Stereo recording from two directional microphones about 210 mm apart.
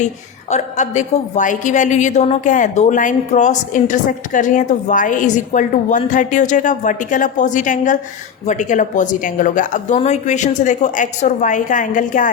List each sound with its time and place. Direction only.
0.5 s a woman's voice: 35° left (ahead or behind)